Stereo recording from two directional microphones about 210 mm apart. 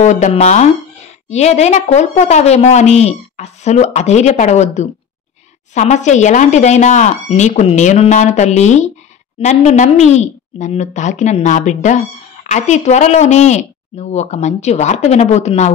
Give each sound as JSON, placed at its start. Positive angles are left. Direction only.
{"t": 0.0, "sound": "a woman's voice", "side_deg": 35}